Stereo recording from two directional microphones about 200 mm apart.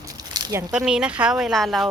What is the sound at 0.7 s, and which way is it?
A woman's voice, 5° right (ahead or behind).